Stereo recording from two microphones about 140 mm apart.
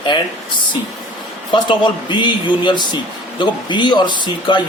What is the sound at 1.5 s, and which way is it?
A man's voice, 35° left (ahead or behind).